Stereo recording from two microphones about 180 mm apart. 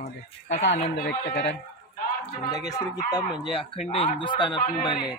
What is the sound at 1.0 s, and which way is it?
Speech, 60° left (ahead or behind).